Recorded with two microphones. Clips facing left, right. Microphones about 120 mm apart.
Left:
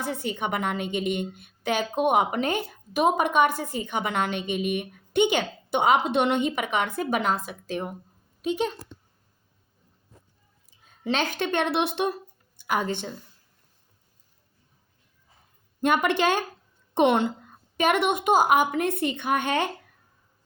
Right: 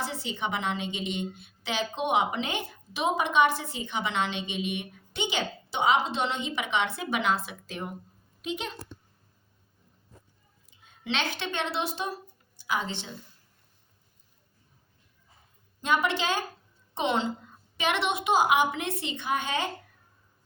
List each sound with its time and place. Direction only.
0.0 s a woman's voice: 50° left (ahead or behind)
10.8 s speech: 40° left (ahead or behind)
15.8 s a woman's voice: 55° left (ahead or behind)